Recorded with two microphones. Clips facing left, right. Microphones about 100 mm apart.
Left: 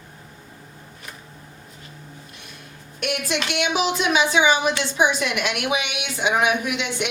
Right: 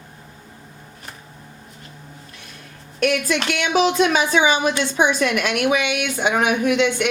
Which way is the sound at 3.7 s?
45° right (ahead or behind).